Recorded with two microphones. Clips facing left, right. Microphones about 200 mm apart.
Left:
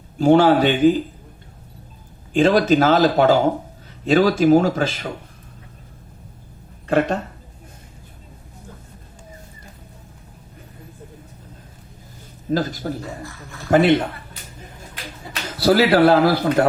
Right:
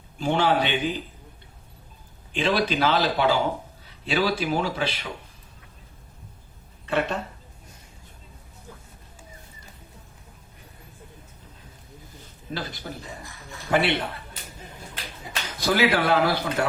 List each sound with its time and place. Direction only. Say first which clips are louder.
0.2 s speech: left 9 dB; 45° left (ahead or behind)
2.3 s speech: left 9 dB; 45° left (ahead or behind)
6.8 s speech: left 7 dB; 40° left (ahead or behind)
12.5 s speech: left 11 dB; 45° left (ahead or behind)
15.4 s speech: left 7 dB; 40° left (ahead or behind)